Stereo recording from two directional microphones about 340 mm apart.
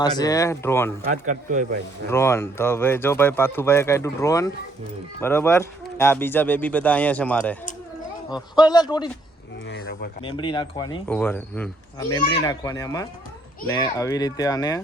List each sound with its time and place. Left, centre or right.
0.0 s speech: centre
1.3 s speech: right
2.0 s speech: centre
9.6 s speech: left
10.2 s speech: centre